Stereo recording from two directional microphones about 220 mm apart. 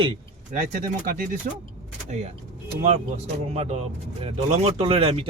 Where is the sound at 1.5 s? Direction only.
40° right (ahead or behind).